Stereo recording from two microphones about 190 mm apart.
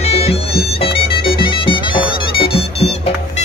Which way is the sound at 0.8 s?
30° left (ahead or behind).